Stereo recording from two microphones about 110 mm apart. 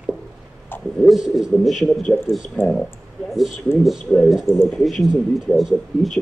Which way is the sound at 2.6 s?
20° left (ahead or behind).